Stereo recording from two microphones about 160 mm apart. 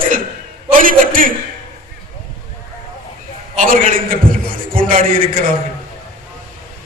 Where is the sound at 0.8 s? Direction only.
60° right (ahead or behind).